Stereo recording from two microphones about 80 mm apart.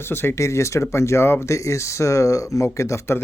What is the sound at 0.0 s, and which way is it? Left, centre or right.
Speech, left.